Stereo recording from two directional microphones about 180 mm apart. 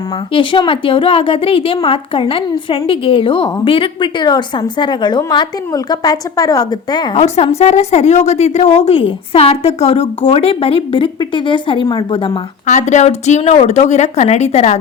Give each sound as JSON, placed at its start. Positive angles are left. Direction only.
{"t": 0.3, "sound": "a woman's voice", "side_deg": 30}
{"t": 7.2, "sound": "a woman's voice", "side_deg": 35}
{"t": 12.6, "sound": "a woman's voice", "side_deg": 40}